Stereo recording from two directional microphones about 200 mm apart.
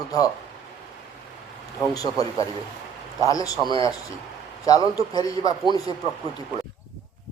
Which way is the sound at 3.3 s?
20° left (ahead or behind).